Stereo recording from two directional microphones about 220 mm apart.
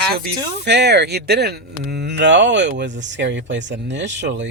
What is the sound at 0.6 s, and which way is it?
Speech, 50° right (ahead or behind).